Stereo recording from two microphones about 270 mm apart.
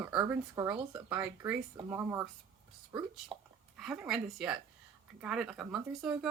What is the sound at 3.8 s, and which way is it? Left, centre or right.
Speech, centre.